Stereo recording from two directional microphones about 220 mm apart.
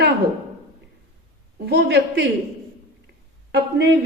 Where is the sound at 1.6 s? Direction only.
50° right (ahead or behind).